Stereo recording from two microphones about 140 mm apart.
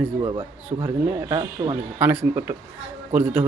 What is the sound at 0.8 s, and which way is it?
Speech, 25° right (ahead or behind).